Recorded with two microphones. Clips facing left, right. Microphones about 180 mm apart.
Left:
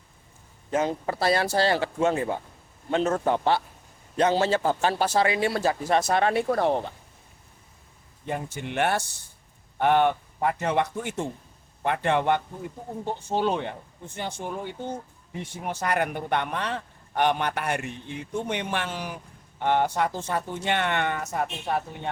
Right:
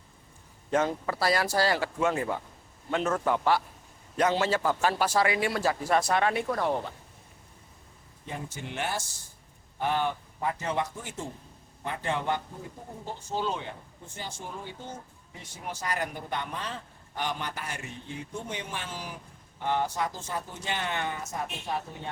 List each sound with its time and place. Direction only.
0.9 s a man's voice: 25° left (ahead or behind)
8.3 s speech: 60° left (ahead or behind)